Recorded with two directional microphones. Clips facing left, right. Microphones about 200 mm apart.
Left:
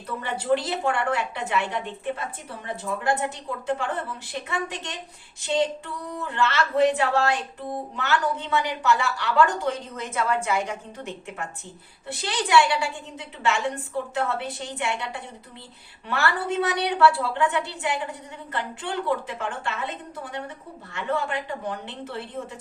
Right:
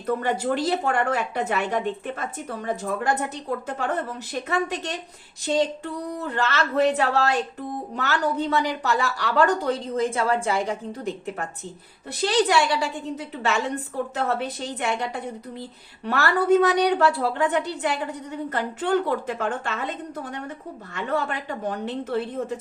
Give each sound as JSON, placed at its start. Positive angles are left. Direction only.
{"t": 0.0, "sound": "a woman's voice", "side_deg": -50}